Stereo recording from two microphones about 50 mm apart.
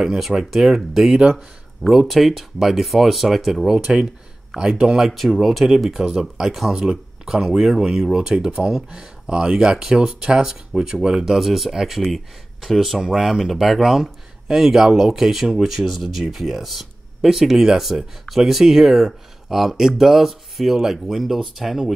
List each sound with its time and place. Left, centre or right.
0.0 s speech: centre
3.7 s speech: centre
6.7 s speech: centre